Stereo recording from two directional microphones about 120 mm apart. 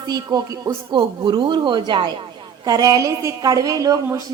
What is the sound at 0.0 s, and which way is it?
Speech, 35° right (ahead or behind).